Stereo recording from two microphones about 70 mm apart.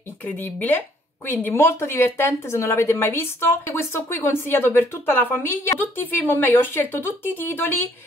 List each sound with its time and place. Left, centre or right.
0.2 s a woman's voice: left